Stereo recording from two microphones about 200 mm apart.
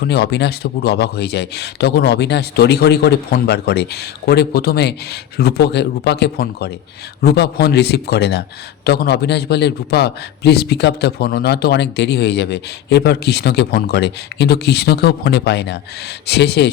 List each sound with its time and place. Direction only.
0.0 s a man's voice: 55° left (ahead or behind)